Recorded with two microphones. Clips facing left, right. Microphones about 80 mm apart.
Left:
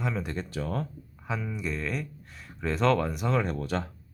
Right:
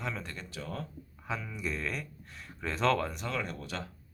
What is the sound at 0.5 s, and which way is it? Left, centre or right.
Speech, left.